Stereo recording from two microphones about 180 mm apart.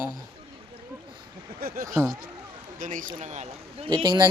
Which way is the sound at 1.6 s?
60° right (ahead or behind).